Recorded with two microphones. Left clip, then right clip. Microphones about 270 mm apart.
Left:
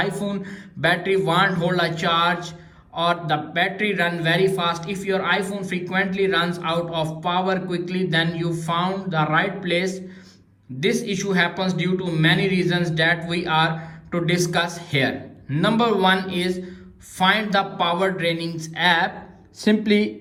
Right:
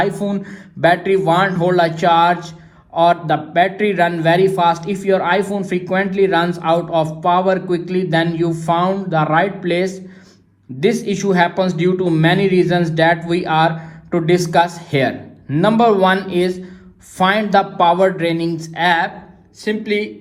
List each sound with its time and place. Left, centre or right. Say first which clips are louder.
0.0 s a man's voice: right 6 dB; centre
19.6 s speech: right 1 dB; centre